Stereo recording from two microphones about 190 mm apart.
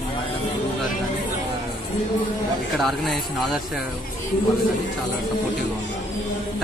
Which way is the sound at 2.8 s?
Centre (ahead or behind).